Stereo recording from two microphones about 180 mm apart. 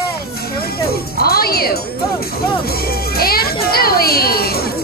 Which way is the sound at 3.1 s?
60° left (ahead or behind).